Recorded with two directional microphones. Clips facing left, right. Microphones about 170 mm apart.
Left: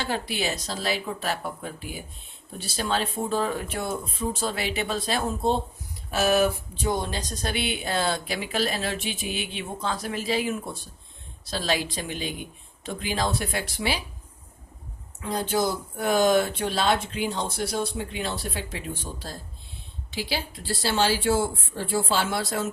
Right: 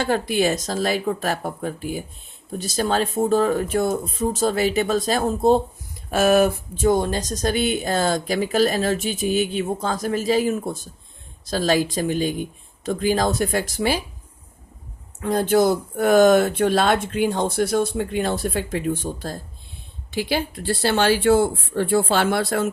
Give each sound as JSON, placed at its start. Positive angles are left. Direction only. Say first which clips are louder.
{"t": 0.0, "sound": "speech", "louder": "right 8 dB", "side_deg": -50}
{"t": 15.2, "sound": "speech", "louder": "right 8 dB", "side_deg": -55}